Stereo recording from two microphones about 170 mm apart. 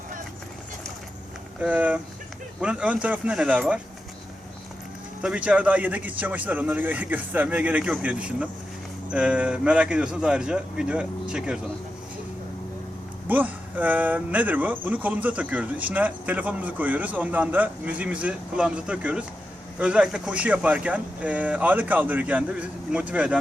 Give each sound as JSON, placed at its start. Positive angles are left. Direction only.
{"t": 1.6, "sound": "speech", "side_deg": -10}
{"t": 5.2, "sound": "a man's voice", "side_deg": -5}
{"t": 13.2, "sound": "speech", "side_deg": -10}